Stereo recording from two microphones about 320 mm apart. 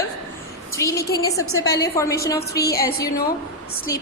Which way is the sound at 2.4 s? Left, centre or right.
Left.